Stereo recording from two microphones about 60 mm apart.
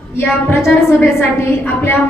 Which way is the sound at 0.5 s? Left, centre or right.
Left.